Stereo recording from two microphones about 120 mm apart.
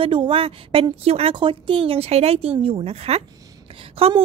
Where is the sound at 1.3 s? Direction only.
45° right (ahead or behind).